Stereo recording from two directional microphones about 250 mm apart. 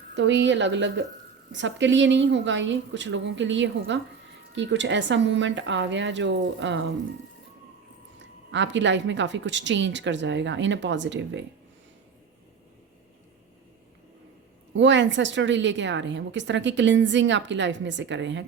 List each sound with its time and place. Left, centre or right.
0.2 s a woman's voice: right
8.5 s a woman's voice: right
14.7 s a woman's voice: right